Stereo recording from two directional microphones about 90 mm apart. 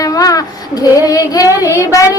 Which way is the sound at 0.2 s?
40° left (ahead or behind).